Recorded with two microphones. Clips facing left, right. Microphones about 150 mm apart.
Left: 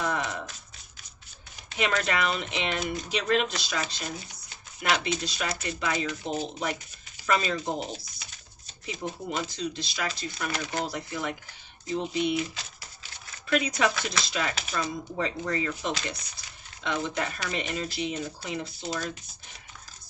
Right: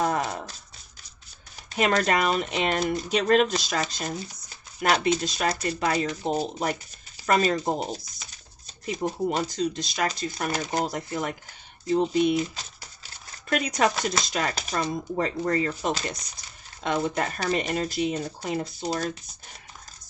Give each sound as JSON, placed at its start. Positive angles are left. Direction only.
{"t": 0.0, "sound": "a sound", "side_deg": -40}
{"t": 1.7, "sound": "speech", "side_deg": -40}
{"t": 9.3, "sound": "speech", "side_deg": -45}
{"t": 13.5, "sound": "speech", "side_deg": -45}